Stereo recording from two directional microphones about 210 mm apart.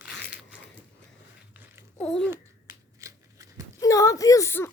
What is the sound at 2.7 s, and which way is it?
Shuffling cards, 15° right (ahead or behind).